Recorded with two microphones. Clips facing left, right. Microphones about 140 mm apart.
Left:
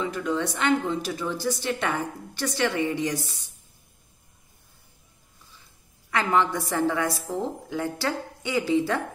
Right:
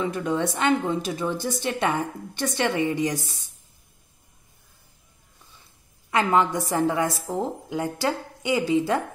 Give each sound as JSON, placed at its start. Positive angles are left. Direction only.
{"t": 0.0, "sound": "a woman's voice", "side_deg": -20}
{"t": 6.0, "sound": "a woman's voice", "side_deg": -20}